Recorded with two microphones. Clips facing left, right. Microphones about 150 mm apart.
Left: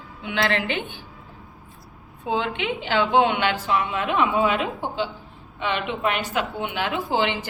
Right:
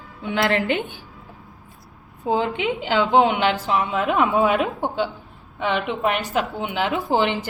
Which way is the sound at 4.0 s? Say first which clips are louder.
Right 3 dB; 45° right (ahead or behind).